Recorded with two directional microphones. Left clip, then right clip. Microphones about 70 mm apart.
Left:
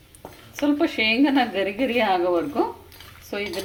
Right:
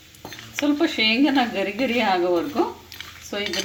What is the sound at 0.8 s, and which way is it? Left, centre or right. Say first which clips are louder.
A woman's voice: right 1 dB; centre.